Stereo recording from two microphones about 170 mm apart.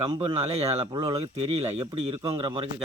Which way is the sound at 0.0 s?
30° right (ahead or behind).